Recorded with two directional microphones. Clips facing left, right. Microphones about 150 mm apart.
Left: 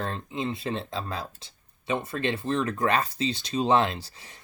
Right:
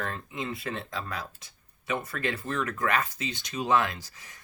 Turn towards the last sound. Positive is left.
turn(degrees=30)  # may be behind; listen again after turning